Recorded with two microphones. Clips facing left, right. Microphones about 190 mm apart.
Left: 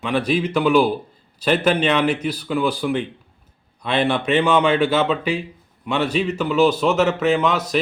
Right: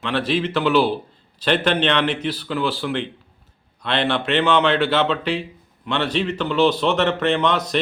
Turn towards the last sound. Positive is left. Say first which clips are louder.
# left 1 dB
turn(degrees=5)  # may be behind; listen again after turning